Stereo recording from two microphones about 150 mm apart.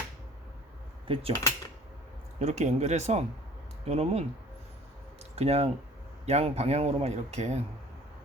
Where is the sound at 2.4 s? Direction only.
50° right (ahead or behind).